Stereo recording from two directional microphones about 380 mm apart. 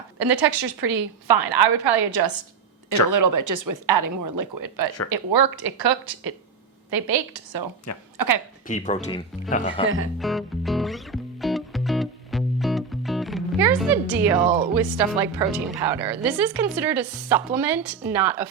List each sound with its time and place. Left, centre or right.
0.2 s a woman's voice: right
3.1 s a woman's voice: right
7.9 s speech: left
8.6 s speech: centre
9.8 s speech: right
10.2 s music: centre
14.8 s a woman's voice: centre